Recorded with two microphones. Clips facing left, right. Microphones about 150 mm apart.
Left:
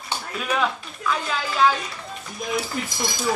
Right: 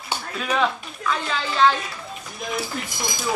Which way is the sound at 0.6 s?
5° left (ahead or behind).